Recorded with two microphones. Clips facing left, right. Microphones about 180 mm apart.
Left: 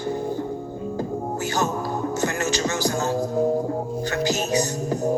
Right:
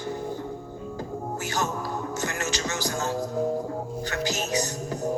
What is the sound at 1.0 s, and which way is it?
Music, 30° left (ahead or behind).